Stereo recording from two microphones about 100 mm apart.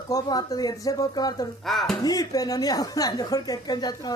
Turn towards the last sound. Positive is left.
turn(degrees=45)  # may be behind; listen again after turning